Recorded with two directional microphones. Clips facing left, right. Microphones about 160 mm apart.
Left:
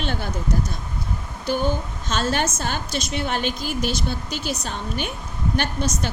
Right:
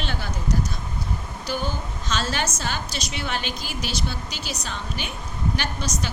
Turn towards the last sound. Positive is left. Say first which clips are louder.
# left 4 dB
turn(degrees=55)  # may be behind; listen again after turning